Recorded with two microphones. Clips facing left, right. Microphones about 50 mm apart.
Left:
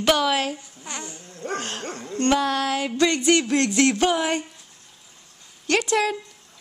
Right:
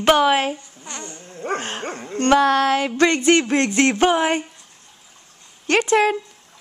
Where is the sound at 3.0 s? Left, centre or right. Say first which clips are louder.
Right 2 dB; right.